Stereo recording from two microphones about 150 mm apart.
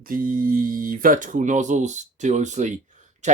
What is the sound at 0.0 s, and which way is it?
Speech, 70° right (ahead or behind).